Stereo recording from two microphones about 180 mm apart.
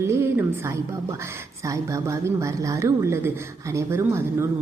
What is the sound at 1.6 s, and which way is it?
A woman's voice, 20° right (ahead or behind).